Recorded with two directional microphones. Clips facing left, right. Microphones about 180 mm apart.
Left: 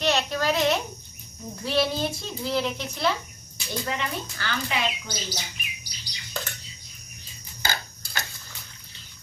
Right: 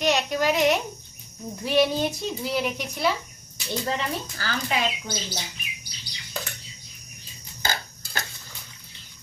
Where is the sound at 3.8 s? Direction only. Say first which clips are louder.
Right 2 dB; 30° right (ahead or behind).